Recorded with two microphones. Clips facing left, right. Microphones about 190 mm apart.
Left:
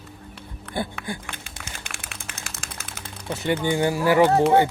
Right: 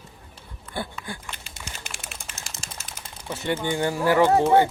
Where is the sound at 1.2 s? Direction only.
50° left (ahead or behind).